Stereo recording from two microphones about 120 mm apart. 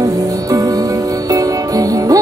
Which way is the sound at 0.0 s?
30° right (ahead or behind).